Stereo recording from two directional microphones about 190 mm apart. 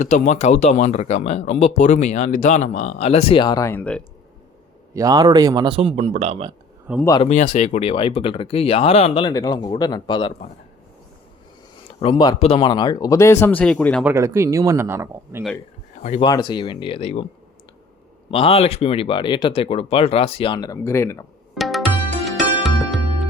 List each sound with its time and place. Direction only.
0.0 s speech: 40° left (ahead or behind); by 4.0 s 10° left (ahead or behind)
4.9 s speech: 20° right (ahead or behind)
7.2 s speech: 35° left (ahead or behind)
11.9 s speech: 25° left (ahead or behind); by 14.0 s 5° left (ahead or behind)
14.0 s speech: 15° right (ahead or behind)
16.2 s speech: 25° left (ahead or behind)
18.3 s speech: 30° left (ahead or behind); by 21.2 s 15° left (ahead or behind)
21.5 s tabla: centre (ahead or behind)
22.2 s music: centre (ahead or behind)